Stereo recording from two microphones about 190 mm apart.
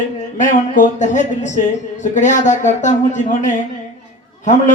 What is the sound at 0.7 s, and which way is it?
Speech, 40° left (ahead or behind).